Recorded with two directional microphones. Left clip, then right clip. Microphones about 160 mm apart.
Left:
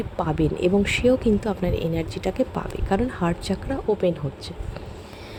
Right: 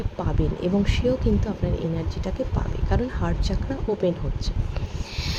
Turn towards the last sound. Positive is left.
turn(degrees=15)  # may be behind; listen again after turning